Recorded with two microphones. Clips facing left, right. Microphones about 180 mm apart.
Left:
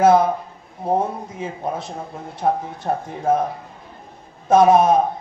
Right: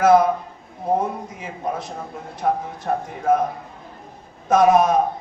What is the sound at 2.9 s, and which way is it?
Speech, 30° left (ahead or behind).